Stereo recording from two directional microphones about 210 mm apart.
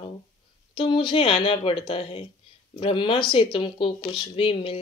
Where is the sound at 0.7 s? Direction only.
20° left (ahead or behind).